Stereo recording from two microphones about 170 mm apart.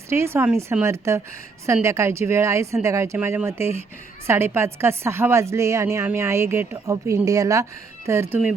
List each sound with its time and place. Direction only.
0.1 s a woman's voice: 15° right (ahead or behind)